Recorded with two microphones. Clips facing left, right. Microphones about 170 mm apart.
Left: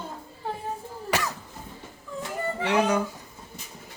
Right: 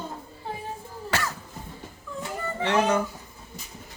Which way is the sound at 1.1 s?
20° left (ahead or behind).